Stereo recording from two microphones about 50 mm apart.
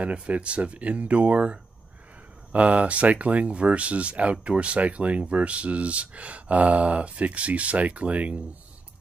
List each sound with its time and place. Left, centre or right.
0.0 s speech: right